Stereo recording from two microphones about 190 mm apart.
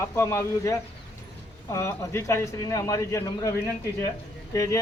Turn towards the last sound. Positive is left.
turn(degrees=15)  # may be behind; listen again after turning